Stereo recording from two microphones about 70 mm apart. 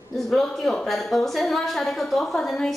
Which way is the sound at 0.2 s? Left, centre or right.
Centre.